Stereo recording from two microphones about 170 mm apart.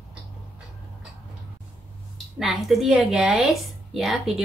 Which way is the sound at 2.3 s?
Centre (ahead or behind).